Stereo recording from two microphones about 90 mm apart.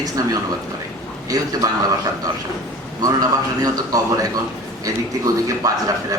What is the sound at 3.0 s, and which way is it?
A man's voice, 40° right (ahead or behind).